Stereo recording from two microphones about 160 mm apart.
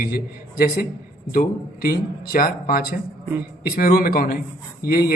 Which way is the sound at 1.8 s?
65° left (ahead or behind).